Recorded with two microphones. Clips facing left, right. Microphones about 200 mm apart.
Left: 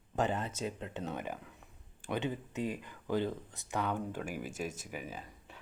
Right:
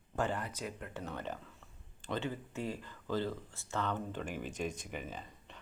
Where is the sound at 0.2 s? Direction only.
20° left (ahead or behind).